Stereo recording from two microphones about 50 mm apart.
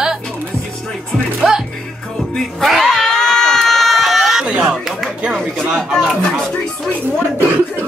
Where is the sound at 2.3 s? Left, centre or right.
Centre.